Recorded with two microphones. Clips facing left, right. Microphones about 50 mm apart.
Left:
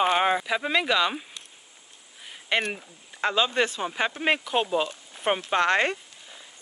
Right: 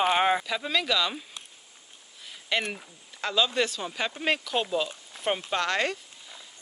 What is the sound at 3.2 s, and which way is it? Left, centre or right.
Speech, left.